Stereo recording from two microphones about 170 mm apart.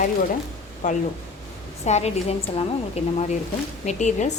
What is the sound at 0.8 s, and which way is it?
A woman's voice, 45° left (ahead or behind).